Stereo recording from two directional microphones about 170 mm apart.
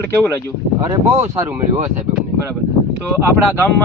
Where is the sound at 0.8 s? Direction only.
15° right (ahead or behind).